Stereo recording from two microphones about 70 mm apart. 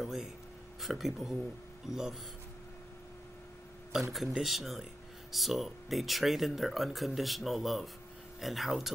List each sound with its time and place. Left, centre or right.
0.0 s a man's voice: centre
3.9 s speech: centre